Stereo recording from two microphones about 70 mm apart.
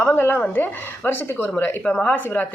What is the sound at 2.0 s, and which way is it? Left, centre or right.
Speech, left.